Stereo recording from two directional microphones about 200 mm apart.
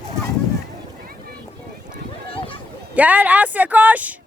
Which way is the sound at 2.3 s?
25° left (ahead or behind).